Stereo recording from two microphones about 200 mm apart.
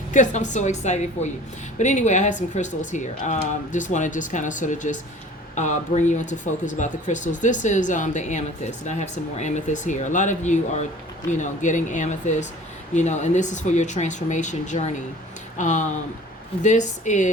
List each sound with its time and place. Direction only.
0.1 s speech: 40° left (ahead or behind)